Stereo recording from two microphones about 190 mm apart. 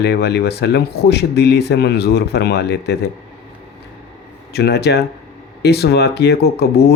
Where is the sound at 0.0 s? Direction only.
60° left (ahead or behind).